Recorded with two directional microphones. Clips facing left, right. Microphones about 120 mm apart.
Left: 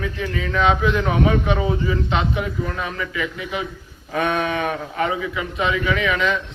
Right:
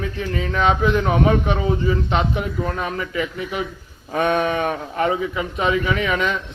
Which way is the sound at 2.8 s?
40° right (ahead or behind).